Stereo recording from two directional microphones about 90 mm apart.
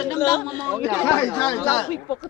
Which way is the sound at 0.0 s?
45° left (ahead or behind).